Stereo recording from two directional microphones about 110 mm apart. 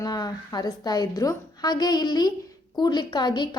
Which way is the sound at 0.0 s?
35° left (ahead or behind).